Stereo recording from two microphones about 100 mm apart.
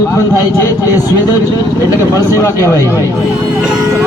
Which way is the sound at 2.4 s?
30° left (ahead or behind).